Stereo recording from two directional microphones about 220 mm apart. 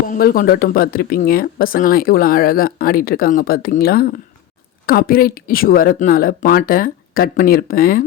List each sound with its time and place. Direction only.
0.1 s speech: 40° left (ahead or behind)